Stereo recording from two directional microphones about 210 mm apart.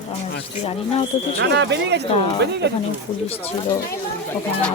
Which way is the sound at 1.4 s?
55° right (ahead or behind).